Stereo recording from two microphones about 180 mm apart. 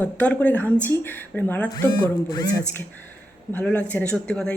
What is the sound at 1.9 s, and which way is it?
Speech, 20° left (ahead or behind).